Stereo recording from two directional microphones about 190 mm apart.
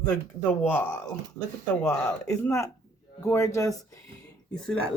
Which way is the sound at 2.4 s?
15° left (ahead or behind).